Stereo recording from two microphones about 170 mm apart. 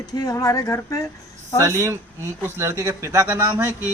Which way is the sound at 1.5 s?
15° right (ahead or behind).